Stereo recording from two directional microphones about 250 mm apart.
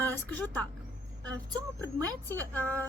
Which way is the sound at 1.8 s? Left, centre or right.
Centre.